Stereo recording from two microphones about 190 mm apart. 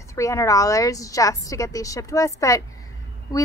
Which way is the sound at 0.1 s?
15° left (ahead or behind).